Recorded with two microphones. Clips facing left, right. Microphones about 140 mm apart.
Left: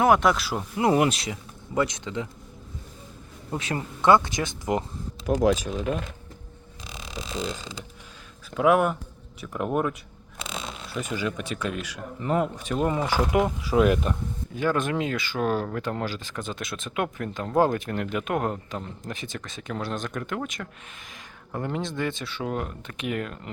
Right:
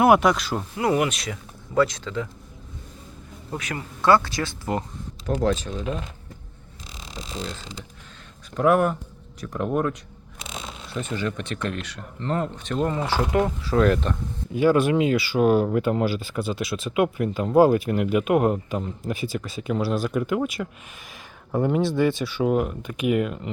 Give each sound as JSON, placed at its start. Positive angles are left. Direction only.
{"t": 0.0, "sound": "speech", "side_deg": -5}
{"t": 0.8, "sound": "speech", "side_deg": 25}
{"t": 3.5, "sound": "speech", "side_deg": 25}
{"t": 8.5, "sound": "speech", "side_deg": 0}
{"t": 10.9, "sound": "speech", "side_deg": 10}
{"t": 14.5, "sound": "speech", "side_deg": -10}